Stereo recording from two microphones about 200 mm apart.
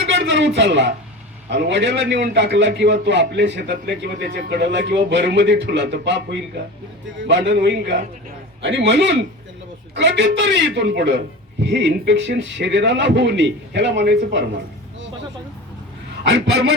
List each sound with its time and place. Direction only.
0.0 s a man's voice: 65° right (ahead or behind)
7.3 s a man's voice: 60° right (ahead or behind)
16.3 s a man's voice: 50° right (ahead or behind)